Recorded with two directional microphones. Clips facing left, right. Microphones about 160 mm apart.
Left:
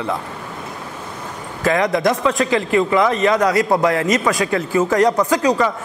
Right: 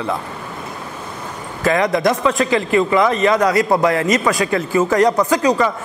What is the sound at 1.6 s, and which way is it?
A man's voice, 15° right (ahead or behind).